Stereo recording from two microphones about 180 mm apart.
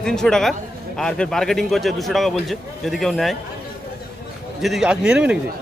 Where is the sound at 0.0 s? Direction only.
5° left (ahead or behind).